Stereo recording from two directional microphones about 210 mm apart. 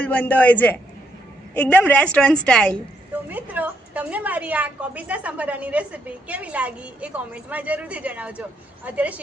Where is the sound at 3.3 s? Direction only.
10° right (ahead or behind).